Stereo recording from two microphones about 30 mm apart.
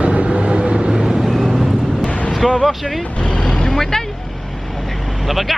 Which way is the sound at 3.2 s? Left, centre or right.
Left.